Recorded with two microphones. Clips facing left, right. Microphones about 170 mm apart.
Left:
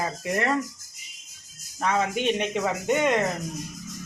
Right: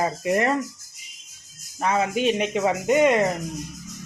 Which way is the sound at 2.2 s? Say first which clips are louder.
Right 3 dB; 5° right (ahead or behind).